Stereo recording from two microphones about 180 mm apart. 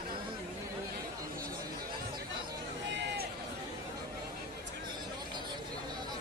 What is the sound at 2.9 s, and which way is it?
Run, 75° right (ahead or behind).